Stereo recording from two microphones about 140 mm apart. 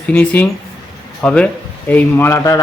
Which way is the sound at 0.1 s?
10° left (ahead or behind).